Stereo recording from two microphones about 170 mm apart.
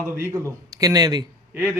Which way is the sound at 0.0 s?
20° right (ahead or behind).